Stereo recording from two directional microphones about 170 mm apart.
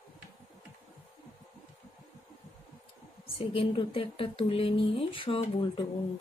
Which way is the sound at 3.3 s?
35° left (ahead or behind).